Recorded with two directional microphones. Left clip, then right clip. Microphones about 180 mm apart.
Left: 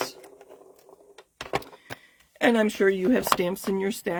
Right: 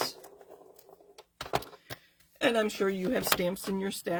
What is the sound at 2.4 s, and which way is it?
Speech, 50° left (ahead or behind).